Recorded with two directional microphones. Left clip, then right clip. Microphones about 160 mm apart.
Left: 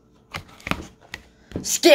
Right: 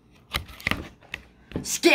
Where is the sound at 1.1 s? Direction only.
30° left (ahead or behind).